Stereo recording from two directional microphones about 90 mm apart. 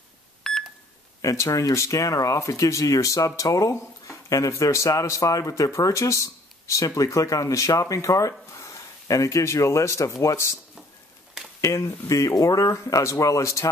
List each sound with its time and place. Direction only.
0.4 s beep: 5° left (ahead or behind)
1.2 s speech: 35° left (ahead or behind)
11.6 s speech: 35° left (ahead or behind)